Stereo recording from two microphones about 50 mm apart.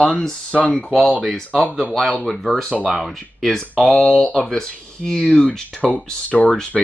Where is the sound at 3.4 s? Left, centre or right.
Centre.